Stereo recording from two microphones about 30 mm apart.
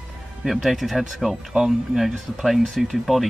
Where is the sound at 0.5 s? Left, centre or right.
Centre.